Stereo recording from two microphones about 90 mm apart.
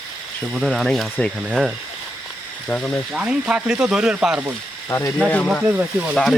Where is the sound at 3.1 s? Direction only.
10° right (ahead or behind).